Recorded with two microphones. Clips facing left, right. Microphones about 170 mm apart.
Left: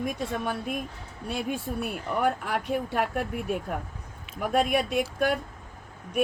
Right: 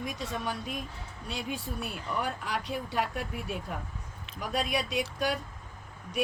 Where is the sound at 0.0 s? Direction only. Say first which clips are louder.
Left 5 dB; 55° left (ahead or behind).